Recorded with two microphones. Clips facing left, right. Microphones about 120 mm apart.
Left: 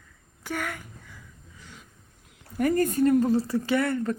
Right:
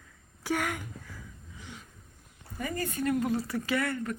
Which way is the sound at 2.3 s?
70° left (ahead or behind).